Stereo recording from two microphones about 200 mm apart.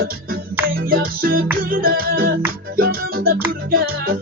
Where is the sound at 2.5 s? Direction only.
50° right (ahead or behind).